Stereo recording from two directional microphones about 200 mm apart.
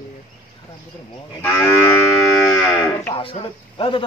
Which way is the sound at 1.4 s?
15° left (ahead or behind).